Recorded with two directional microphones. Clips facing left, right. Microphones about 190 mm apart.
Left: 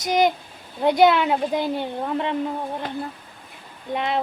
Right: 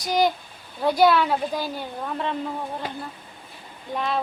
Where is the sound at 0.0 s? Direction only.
20° left (ahead or behind).